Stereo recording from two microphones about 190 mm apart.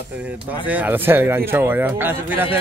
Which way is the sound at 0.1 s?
5° right (ahead or behind).